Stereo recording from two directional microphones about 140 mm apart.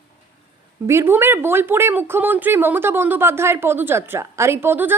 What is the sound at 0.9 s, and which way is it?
A woman's voice, 15° right (ahead or behind).